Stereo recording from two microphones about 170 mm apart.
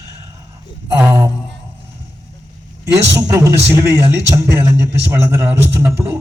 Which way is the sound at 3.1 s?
20° right (ahead or behind).